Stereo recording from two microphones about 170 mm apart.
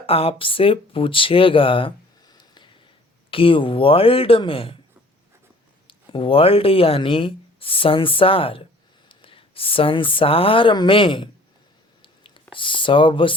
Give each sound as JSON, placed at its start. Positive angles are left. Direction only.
{"t": 0.0, "sound": "speech", "side_deg": 35}
{"t": 5.9, "sound": "speech", "side_deg": 30}
{"t": 12.0, "sound": "a sound", "side_deg": 30}